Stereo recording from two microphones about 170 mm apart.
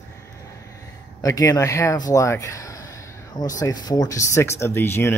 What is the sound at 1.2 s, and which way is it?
Speech, 20° left (ahead or behind).